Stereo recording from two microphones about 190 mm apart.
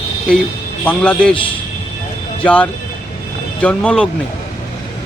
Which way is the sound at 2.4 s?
5° left (ahead or behind).